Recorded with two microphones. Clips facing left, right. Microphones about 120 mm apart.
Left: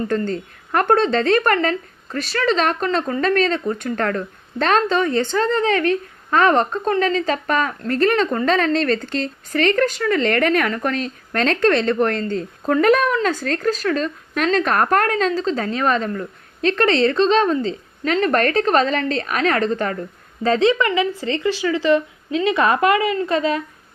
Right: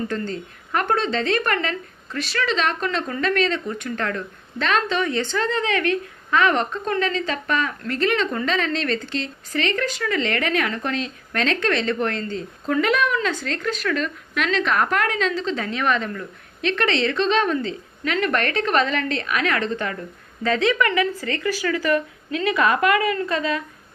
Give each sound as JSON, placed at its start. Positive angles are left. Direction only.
{"t": 0.1, "sound": "a woman's voice", "side_deg": 45}